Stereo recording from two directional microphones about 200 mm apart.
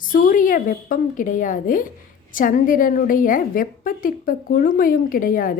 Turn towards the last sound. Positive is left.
turn(degrees=45)  # may be behind; listen again after turning